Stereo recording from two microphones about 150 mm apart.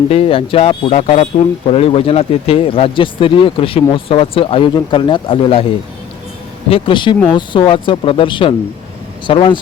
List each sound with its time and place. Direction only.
0.1 s speech: 40° left (ahead or behind)
6.7 s speech: 40° left (ahead or behind)